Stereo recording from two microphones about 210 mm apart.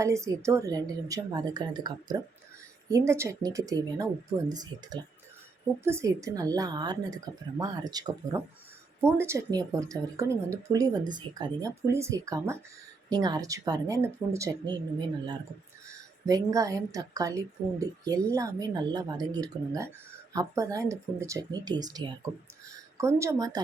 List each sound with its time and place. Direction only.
0.0 s a woman's voice: 15° right (ahead or behind)